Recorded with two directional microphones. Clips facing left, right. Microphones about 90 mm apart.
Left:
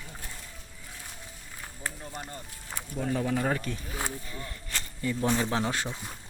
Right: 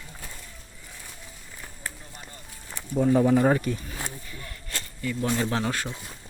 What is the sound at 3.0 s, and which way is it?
Speech, 20° right (ahead or behind).